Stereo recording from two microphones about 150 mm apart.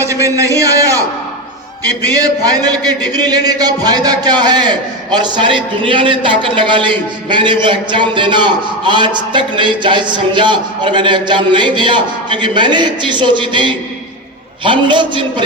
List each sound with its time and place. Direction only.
0.0 s a man's voice: 20° right (ahead or behind)
2.0 s a man's voice: 25° right (ahead or behind)